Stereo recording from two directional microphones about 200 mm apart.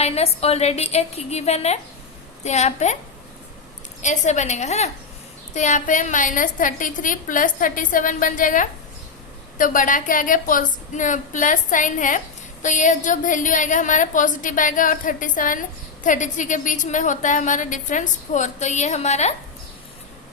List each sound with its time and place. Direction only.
0.0 s a woman's voice: 30° left (ahead or behind)
4.0 s a woman's voice: 35° left (ahead or behind)